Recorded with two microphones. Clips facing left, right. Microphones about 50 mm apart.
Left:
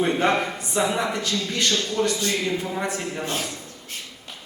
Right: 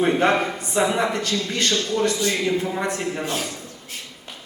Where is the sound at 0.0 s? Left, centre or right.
Centre.